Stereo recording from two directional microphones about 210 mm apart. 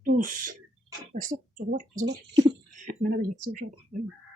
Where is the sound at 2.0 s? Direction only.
40° right (ahead or behind).